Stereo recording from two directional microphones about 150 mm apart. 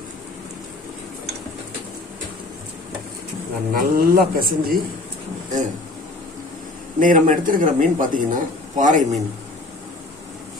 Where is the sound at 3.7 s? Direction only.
75° right (ahead or behind).